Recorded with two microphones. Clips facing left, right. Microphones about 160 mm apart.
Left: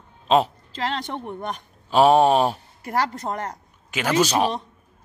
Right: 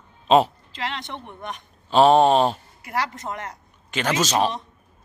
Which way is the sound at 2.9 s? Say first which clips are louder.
Left 3 dB; 40° left (ahead or behind).